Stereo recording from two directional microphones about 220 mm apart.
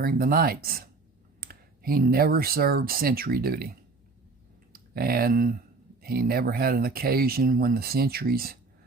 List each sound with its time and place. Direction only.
0.0 s speech: 40° right (ahead or behind)